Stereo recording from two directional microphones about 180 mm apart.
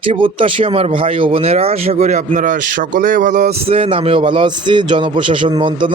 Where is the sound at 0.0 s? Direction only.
30° right (ahead or behind).